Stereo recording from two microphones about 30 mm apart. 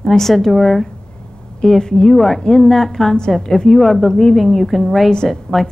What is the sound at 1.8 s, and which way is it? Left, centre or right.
Speech, left.